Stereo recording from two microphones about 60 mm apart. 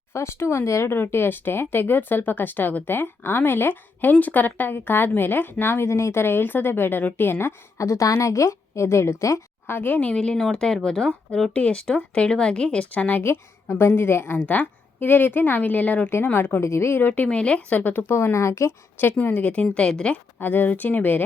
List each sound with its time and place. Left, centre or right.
0.1 s speech: left
7.8 s speech: left
9.6 s speech: left
10.1 s speech: centre
11.5 s speech: centre
13.2 s speech: left
16.3 s speech: left
17.2 s speech: centre
18.1 s speech: left
19.2 s speech: left
20.4 s speech: left